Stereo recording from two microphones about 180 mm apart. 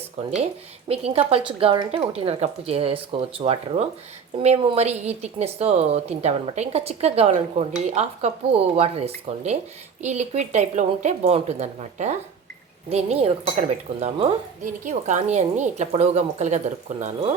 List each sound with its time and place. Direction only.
0.2 s a woman's voice: 35° right (ahead or behind)